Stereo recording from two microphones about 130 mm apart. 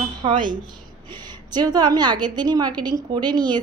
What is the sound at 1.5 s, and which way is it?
A woman's voice, 30° right (ahead or behind).